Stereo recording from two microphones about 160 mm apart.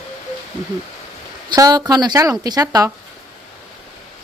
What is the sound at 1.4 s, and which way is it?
Speech, 25° right (ahead or behind).